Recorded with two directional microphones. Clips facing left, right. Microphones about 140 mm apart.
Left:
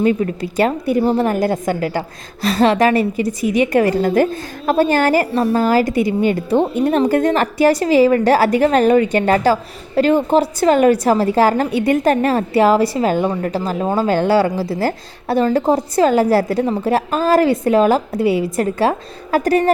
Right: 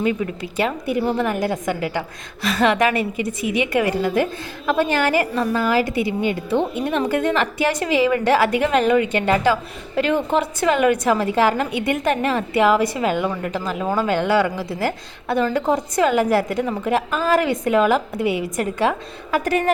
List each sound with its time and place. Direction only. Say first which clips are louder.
0.0 s a woman's voice: left 5 dB; 45° left (ahead or behind)